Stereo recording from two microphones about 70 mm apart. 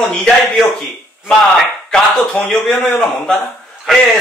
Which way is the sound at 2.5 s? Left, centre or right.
Centre.